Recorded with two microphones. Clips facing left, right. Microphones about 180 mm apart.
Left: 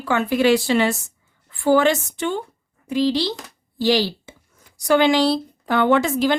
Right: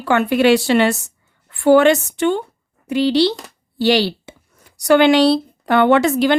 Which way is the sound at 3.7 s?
70° right (ahead or behind).